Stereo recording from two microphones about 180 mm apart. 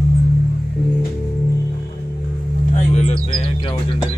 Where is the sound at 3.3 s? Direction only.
25° left (ahead or behind).